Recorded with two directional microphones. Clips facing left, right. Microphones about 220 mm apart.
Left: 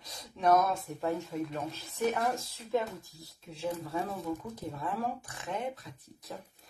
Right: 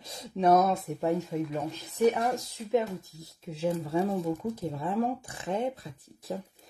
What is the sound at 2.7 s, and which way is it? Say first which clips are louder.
Speech: right 4 dB; 20° right (ahead or behind).